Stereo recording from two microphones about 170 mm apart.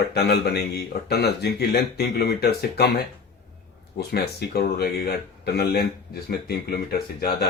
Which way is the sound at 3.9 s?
70° left (ahead or behind).